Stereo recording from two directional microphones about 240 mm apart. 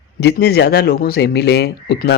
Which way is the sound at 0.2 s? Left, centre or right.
Left.